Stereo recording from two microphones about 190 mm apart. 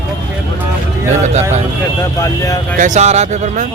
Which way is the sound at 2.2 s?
15° left (ahead or behind).